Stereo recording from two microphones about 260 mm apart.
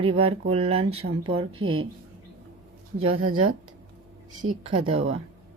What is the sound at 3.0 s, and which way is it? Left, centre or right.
Speech, right.